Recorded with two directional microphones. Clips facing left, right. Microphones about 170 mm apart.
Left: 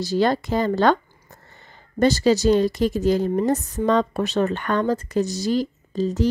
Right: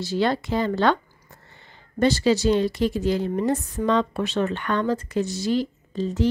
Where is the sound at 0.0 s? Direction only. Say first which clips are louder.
Left 3 dB; 40° left (ahead or behind).